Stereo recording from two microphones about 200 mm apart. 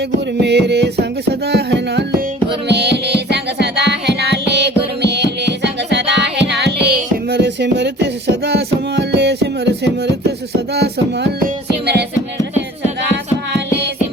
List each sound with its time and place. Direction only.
0.0 s music: 60° right (ahead or behind)